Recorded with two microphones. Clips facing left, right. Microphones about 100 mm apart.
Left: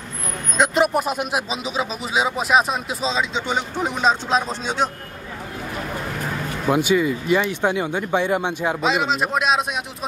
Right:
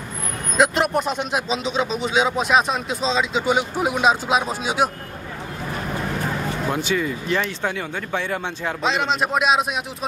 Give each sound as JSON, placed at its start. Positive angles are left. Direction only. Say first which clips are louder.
{"t": 0.6, "sound": "speech", "louder": "even", "side_deg": 0}
{"t": 6.7, "sound": "speech", "louder": "left 7 dB", "side_deg": 10}
{"t": 8.8, "sound": "speech", "louder": "right 1 dB", "side_deg": 0}